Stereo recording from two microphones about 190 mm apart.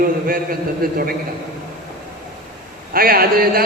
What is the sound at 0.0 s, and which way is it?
Speech, 50° right (ahead or behind).